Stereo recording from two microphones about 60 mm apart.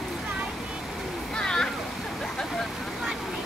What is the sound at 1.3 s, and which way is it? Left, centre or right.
Splash, centre.